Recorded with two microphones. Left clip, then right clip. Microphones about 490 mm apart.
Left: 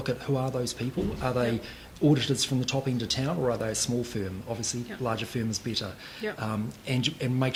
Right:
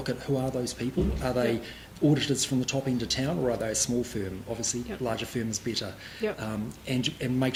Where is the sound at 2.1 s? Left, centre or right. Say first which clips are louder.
Left 1 dB; left.